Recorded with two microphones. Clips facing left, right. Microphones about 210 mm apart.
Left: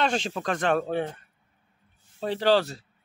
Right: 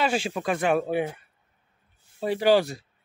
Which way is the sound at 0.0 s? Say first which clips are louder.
Right 1 dB; 10° right (ahead or behind).